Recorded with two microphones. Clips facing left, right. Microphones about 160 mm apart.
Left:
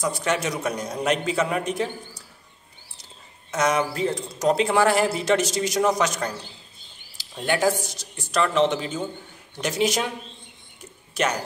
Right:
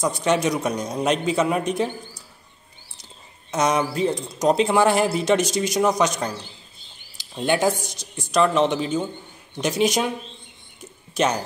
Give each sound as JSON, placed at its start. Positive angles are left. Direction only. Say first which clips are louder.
{"t": 0.0, "sound": "speech", "louder": "right 4 dB", "side_deg": -20}
{"t": 3.5, "sound": "speech", "louder": "right 2 dB", "side_deg": -20}